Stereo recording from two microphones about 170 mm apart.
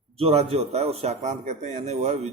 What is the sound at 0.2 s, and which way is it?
A man's voice, 35° right (ahead or behind).